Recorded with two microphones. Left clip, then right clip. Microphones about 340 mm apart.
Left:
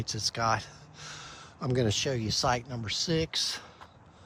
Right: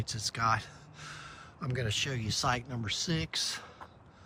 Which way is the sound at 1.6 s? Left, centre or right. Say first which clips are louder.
Left 5 dB; centre.